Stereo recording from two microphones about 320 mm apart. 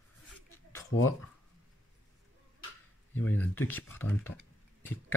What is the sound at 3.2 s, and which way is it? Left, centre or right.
Speech, centre.